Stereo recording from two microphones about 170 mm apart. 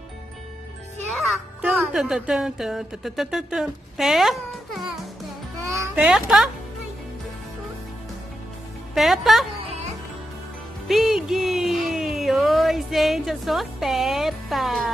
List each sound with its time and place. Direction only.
1.1 s speech: centre (ahead or behind)
5.6 s music: 20° right (ahead or behind)
5.9 s a woman's voice: 5° right (ahead or behind)
8.9 s a woman's voice: centre (ahead or behind)
10.9 s speech: centre (ahead or behind)